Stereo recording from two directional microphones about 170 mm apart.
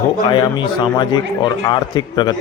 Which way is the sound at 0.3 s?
30° left (ahead or behind).